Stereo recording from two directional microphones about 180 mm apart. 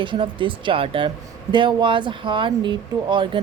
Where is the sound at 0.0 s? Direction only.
25° right (ahead or behind).